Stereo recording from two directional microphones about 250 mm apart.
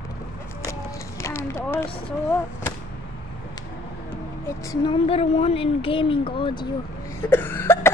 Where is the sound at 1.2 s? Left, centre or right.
Centre.